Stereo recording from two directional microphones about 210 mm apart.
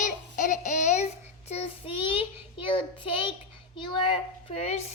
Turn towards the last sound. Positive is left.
turn(degrees=30)  # may be behind; listen again after turning